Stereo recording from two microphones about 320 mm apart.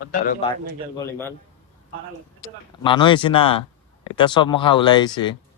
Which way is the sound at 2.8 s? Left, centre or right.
Centre.